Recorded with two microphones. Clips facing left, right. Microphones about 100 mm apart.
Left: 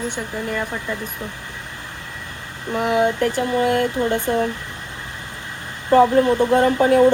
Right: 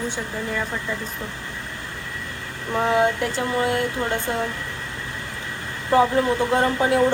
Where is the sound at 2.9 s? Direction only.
15° left (ahead or behind).